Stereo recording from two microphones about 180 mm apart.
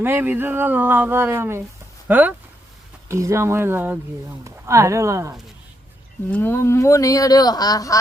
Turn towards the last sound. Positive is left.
turn(degrees=20)  # may be behind; listen again after turning